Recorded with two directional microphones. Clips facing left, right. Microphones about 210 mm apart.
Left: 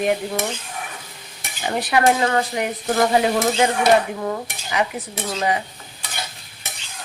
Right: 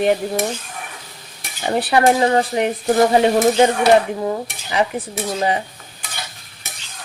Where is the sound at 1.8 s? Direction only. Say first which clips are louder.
Right 3 dB; 30° right (ahead or behind).